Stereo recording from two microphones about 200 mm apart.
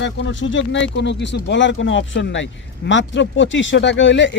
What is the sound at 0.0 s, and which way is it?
Speech, 65° left (ahead or behind).